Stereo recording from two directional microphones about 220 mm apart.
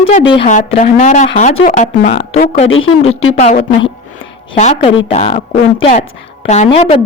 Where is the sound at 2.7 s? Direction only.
65° left (ahead or behind).